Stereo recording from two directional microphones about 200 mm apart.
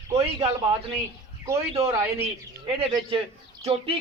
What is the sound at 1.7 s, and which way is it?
Speech, 30° right (ahead or behind).